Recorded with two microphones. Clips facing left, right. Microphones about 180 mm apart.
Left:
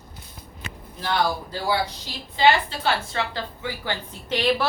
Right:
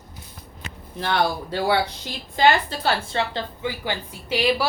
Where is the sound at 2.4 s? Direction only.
40° right (ahead or behind); by 4.7 s 5° right (ahead or behind).